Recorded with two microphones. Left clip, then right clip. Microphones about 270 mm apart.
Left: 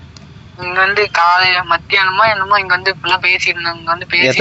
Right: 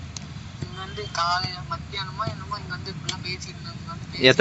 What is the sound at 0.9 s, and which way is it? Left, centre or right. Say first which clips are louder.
Speech: left 10 dB; left.